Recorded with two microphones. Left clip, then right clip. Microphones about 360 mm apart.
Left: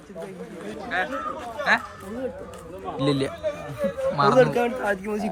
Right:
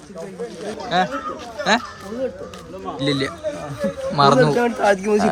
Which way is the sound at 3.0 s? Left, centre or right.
Centre.